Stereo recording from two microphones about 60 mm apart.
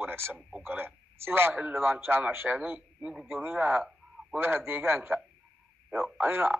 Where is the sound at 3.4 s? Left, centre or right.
Right.